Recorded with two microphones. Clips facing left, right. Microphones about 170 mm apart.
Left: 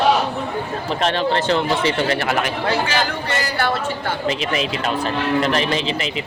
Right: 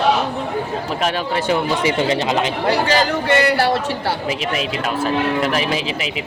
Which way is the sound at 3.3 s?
65° right (ahead or behind).